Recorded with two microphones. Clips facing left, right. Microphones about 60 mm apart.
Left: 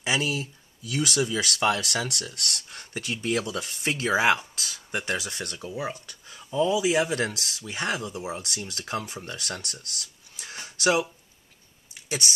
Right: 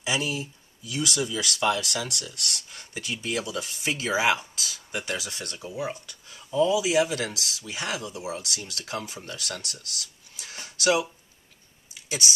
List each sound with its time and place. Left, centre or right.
0.0 s speech: left